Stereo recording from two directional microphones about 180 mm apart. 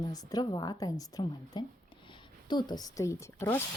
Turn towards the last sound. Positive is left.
turn(degrees=15)  # may be behind; listen again after turning